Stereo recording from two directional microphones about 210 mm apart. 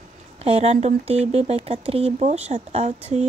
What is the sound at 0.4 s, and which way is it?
Speech, 30° right (ahead or behind).